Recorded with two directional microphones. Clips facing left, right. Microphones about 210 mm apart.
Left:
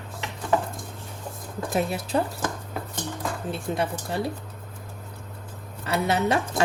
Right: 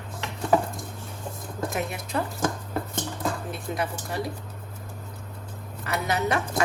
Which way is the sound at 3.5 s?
30° left (ahead or behind).